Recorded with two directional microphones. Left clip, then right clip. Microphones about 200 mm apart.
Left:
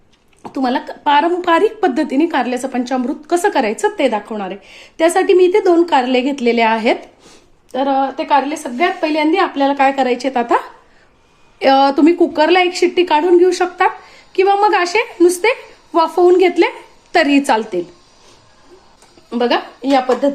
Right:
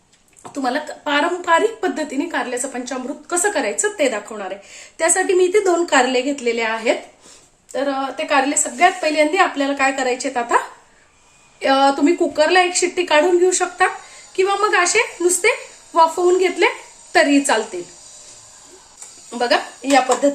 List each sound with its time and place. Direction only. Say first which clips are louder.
0.5 s a woman's voice: left 3 dB; 40° left (ahead or behind)
11.6 s a woman's voice: left 4 dB; 45° left (ahead or behind)
19.3 s speech: left 2 dB; 40° left (ahead or behind)